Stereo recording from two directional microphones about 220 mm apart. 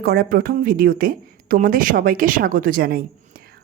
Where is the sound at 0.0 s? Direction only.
45° right (ahead or behind).